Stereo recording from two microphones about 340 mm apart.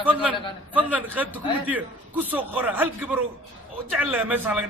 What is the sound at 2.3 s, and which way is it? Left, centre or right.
Speech, centre.